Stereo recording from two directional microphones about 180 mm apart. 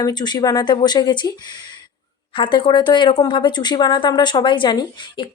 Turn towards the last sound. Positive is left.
turn(degrees=25)  # may be behind; listen again after turning